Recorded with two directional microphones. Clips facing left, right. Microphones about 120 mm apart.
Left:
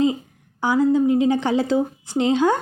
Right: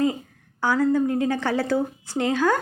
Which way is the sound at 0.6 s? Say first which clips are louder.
Left 3 dB; 15° left (ahead or behind).